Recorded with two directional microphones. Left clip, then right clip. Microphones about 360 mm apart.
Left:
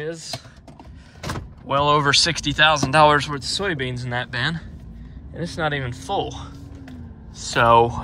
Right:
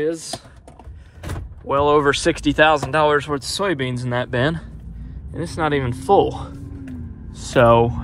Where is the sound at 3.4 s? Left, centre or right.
Centre.